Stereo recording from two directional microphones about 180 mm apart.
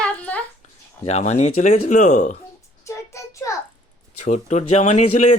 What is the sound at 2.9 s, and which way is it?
Child singing, 15° left (ahead or behind).